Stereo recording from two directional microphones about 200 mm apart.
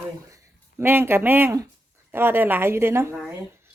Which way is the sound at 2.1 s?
10° right (ahead or behind).